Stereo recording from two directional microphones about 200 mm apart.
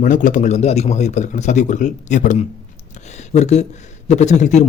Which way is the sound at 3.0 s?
35° left (ahead or behind).